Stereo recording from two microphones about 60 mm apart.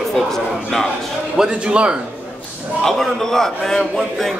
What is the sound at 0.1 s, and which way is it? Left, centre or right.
Speech, centre.